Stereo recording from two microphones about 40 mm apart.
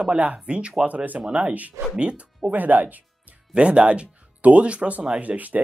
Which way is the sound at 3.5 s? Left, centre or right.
Right.